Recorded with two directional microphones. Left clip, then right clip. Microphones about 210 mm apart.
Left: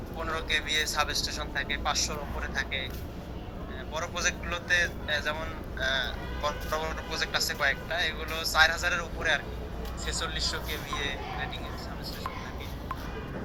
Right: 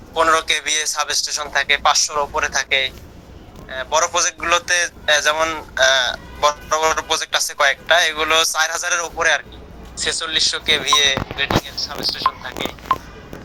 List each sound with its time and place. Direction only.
0.2 s a man's voice: 45° right (ahead or behind)